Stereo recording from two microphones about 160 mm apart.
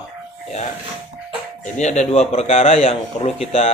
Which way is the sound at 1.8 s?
45° left (ahead or behind).